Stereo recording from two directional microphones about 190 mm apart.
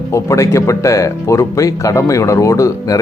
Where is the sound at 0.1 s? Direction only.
15° left (ahead or behind).